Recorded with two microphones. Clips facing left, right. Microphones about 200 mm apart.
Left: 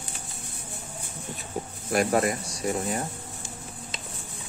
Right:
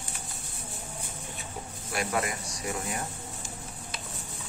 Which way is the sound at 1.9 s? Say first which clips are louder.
Left 7 dB; 40° left (ahead or behind).